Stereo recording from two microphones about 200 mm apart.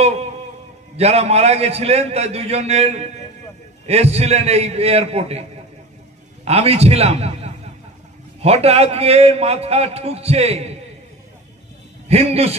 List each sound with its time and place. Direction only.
0.9 s a man's voice: 30° right (ahead or behind)
6.4 s a man's voice: 30° right (ahead or behind)
12.1 s a man's voice: 30° right (ahead or behind)